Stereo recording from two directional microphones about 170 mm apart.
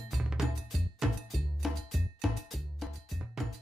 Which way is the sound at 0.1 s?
5° right (ahead or behind).